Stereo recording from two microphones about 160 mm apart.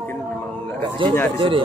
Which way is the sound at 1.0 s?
30° right (ahead or behind).